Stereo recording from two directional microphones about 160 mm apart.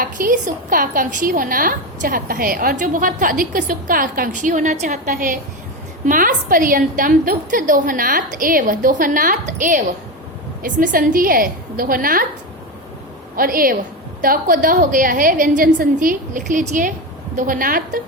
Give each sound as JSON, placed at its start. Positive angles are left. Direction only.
{"t": 0.0, "sound": "a woman's voice", "side_deg": -55}
{"t": 10.6, "sound": "a woman's voice", "side_deg": -60}
{"t": 13.3, "sound": "a woman's voice", "side_deg": -65}